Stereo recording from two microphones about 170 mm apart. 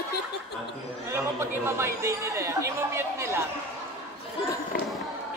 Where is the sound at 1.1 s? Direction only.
15° right (ahead or behind).